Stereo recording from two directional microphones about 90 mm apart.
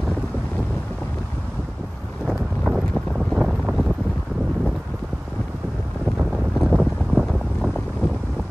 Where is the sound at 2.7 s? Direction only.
Centre (ahead or behind).